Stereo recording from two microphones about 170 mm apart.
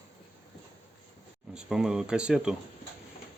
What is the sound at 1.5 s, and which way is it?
Speech, 5° right (ahead or behind).